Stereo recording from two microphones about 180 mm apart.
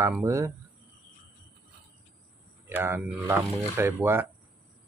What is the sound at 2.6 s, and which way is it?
Speech, 10° right (ahead or behind).